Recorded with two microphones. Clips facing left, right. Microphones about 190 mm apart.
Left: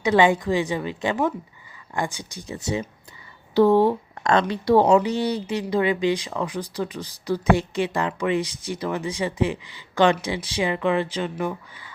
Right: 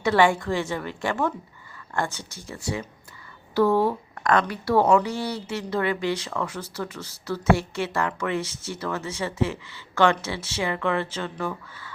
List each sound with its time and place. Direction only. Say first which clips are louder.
0.0 s a woman's voice: left 2 dB; 20° left (ahead or behind)